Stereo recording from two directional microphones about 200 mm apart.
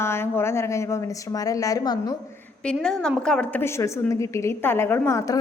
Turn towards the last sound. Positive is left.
turn(degrees=15)  # may be behind; listen again after turning